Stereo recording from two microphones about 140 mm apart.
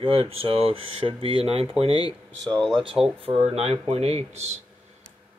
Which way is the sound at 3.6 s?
45° right (ahead or behind).